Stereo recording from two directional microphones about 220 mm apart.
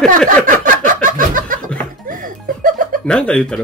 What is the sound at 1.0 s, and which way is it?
Snicker, 35° right (ahead or behind).